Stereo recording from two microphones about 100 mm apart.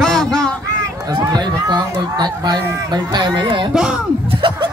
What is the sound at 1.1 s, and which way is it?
Speech, 45° right (ahead or behind).